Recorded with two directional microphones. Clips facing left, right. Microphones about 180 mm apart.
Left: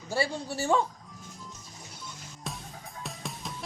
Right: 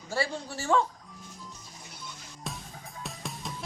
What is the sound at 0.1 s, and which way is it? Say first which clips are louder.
Speech: left 2 dB; 15° left (ahead or behind).